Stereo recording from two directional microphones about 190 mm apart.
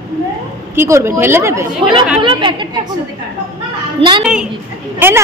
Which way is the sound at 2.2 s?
25° right (ahead or behind).